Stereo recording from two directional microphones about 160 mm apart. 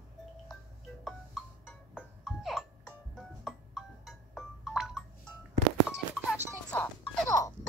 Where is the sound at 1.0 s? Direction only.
5° left (ahead or behind).